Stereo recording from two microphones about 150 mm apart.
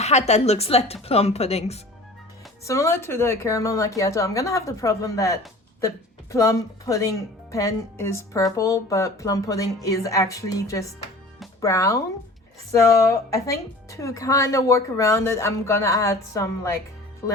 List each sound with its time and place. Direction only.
0.0 s a woman's voice: 45° left (ahead or behind)
2.6 s speech: 20° left (ahead or behind)